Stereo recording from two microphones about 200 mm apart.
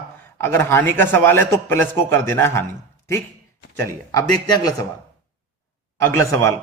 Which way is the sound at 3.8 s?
15° left (ahead or behind).